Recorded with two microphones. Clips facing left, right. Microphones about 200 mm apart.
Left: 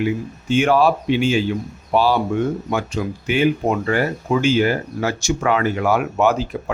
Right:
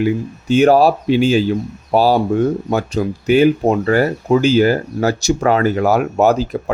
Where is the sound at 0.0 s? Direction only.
40° right (ahead or behind).